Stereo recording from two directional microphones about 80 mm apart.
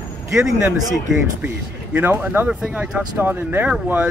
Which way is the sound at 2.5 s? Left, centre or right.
Centre.